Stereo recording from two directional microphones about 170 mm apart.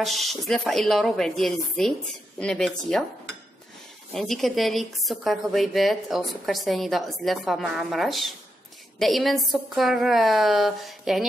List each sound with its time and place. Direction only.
0.0 s a woman's voice: centre (ahead or behind)
4.1 s a woman's voice: centre (ahead or behind)